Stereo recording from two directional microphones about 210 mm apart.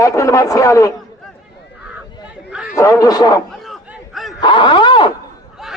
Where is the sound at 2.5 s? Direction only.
5° right (ahead or behind).